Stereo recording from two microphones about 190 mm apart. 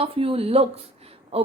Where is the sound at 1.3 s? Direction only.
30° right (ahead or behind).